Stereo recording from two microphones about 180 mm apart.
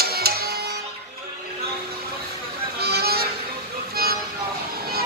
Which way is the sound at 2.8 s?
60° right (ahead or behind).